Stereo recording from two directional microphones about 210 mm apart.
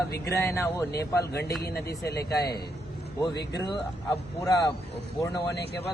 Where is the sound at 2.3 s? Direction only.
50° left (ahead or behind).